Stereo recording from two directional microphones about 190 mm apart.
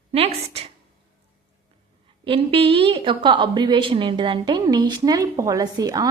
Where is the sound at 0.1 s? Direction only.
30° right (ahead or behind).